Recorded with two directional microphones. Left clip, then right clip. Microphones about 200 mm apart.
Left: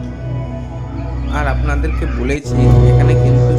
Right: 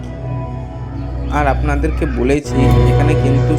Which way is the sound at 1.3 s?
20° right (ahead or behind).